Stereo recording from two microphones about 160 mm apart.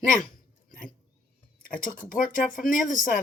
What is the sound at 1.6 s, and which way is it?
A woman's voice, 60° left (ahead or behind).